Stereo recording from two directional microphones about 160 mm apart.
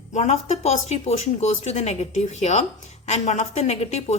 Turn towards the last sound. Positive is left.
turn(degrees=45)  # may be behind; listen again after turning